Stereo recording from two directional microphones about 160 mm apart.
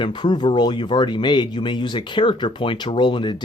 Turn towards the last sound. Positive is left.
turn(degrees=30)  # may be behind; listen again after turning